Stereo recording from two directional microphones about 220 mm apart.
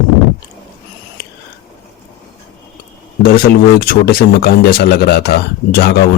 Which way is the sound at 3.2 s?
45° left (ahead or behind).